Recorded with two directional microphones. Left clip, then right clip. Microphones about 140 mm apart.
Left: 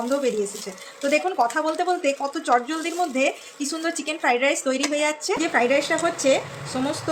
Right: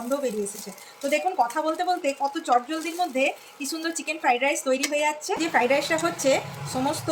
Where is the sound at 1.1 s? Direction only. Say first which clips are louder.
Left 2 dB; 40° left (ahead or behind).